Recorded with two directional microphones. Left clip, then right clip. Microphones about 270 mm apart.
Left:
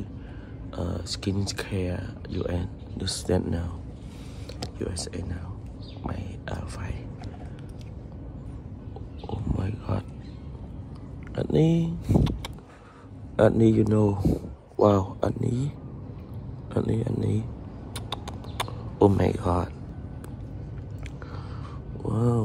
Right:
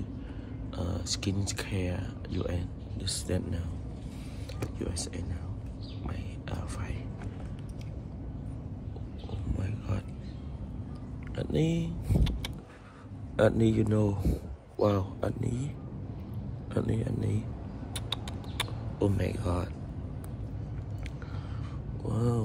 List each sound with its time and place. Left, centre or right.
0.7 s speech: centre
5.0 s speech: centre
9.6 s a sound: centre
11.3 s speech: centre
13.4 s speech: centre
16.7 s speech: centre
17.9 s a sound: centre
22.0 s speech: centre